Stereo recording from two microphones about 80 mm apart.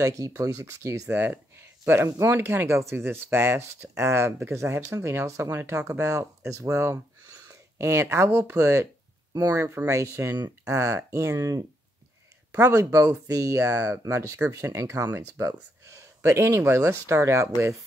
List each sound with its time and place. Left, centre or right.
0.0 s speech: right
5.9 s speech: right